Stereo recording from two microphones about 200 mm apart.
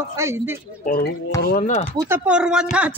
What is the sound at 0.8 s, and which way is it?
Speech, 45° left (ahead or behind).